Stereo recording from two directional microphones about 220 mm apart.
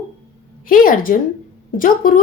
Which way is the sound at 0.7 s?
40° left (ahead or behind).